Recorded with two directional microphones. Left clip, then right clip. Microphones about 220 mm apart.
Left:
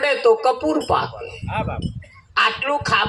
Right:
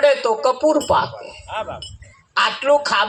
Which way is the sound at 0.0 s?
25° right (ahead or behind).